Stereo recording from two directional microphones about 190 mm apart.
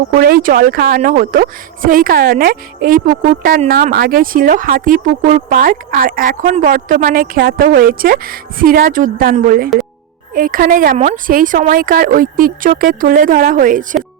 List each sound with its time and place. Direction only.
0.1 s speech: 50° right (ahead or behind)